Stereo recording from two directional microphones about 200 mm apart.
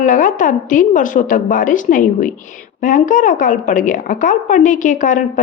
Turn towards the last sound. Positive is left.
turn(degrees=40)  # may be behind; listen again after turning